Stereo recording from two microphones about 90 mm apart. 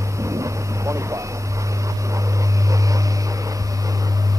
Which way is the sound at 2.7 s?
40° right (ahead or behind).